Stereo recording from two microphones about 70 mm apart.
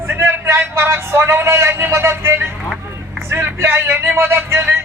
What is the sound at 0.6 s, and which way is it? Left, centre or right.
Speech, right.